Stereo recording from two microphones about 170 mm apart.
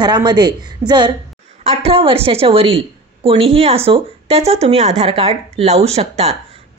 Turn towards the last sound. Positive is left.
turn(degrees=-40)  # may be behind; listen again after turning